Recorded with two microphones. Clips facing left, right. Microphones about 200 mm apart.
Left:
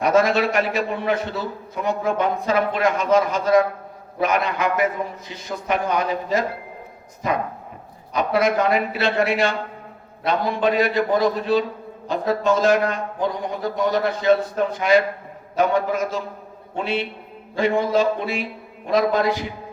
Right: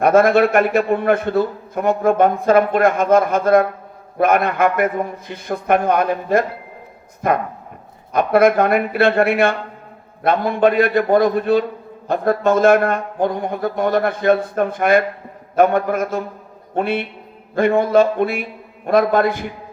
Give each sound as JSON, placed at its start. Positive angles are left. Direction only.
{"t": 0.0, "sound": "a man's voice", "side_deg": -55}